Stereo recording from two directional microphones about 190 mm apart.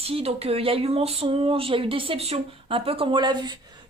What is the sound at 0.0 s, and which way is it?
Speech, 30° right (ahead or behind).